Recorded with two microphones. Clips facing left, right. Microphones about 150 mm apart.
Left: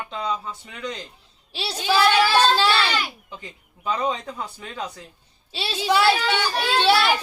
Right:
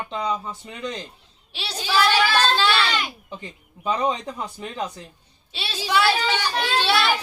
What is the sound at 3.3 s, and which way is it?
Speech, 20° right (ahead or behind).